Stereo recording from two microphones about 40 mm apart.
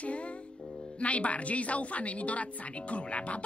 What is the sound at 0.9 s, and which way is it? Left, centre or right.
Speech, left.